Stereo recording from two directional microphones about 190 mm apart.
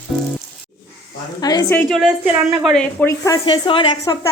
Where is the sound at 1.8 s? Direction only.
Centre (ahead or behind).